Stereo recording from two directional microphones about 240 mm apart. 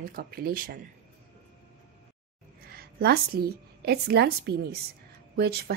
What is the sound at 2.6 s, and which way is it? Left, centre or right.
A woman's voice, right.